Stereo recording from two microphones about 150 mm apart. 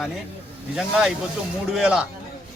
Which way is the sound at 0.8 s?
5° right (ahead or behind).